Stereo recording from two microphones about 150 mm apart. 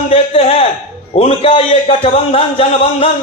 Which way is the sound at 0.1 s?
40° left (ahead or behind).